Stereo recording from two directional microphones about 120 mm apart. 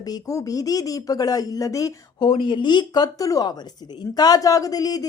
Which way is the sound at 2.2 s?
40° left (ahead or behind).